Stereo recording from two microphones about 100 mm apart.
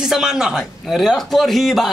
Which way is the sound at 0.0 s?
5° right (ahead or behind).